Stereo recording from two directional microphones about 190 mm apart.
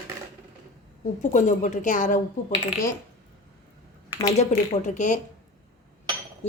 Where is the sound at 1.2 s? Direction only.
40° left (ahead or behind).